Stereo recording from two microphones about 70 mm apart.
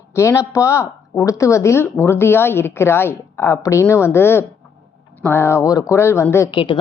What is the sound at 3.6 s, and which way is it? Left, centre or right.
Speech, left.